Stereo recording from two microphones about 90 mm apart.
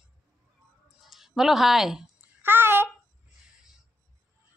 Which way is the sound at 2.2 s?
25° right (ahead or behind).